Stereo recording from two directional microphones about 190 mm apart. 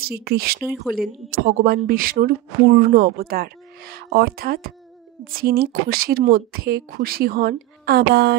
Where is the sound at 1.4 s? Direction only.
55° right (ahead or behind).